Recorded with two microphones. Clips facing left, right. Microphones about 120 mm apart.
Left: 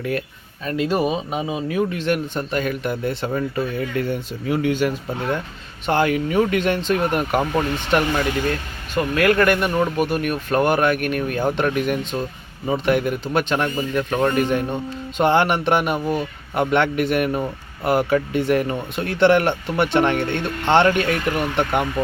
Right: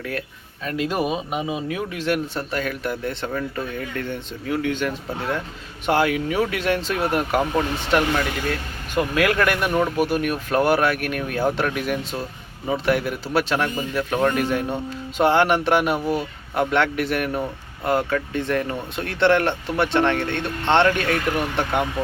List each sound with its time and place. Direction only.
0.6 s a man's voice: 5° right (ahead or behind); by 4.9 s 10° left (ahead or behind)
5.8 s a man's voice: 5° right (ahead or behind)